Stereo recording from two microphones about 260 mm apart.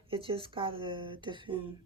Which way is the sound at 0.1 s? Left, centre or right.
Right.